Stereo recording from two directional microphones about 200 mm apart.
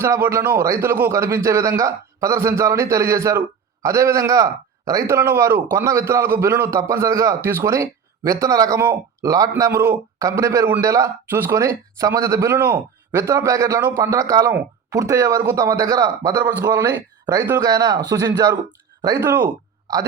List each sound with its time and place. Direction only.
0.0 s a man's voice: 15° right (ahead or behind)